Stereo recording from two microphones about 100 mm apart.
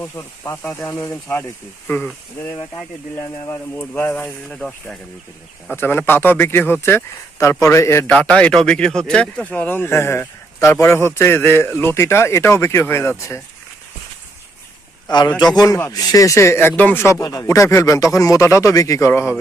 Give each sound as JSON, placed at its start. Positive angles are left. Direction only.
{"t": 0.0, "sound": "speech", "side_deg": 25}
{"t": 3.8, "sound": "speech", "side_deg": 20}
{"t": 4.4, "sound": "speech", "side_deg": 5}
{"t": 5.7, "sound": "speech", "side_deg": 20}
{"t": 8.1, "sound": "speech", "side_deg": 10}
{"t": 15.0, "sound": "a man's voice", "side_deg": 45}